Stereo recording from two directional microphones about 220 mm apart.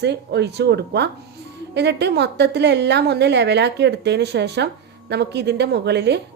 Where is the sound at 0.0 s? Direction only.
50° right (ahead or behind).